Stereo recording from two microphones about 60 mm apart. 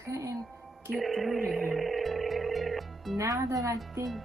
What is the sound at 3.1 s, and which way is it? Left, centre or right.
Speech, right.